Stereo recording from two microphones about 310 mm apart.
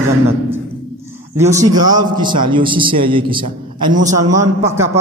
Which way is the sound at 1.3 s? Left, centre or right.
Centre.